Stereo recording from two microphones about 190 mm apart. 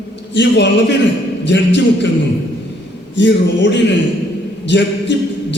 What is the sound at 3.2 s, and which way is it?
A man's voice, 70° left (ahead or behind).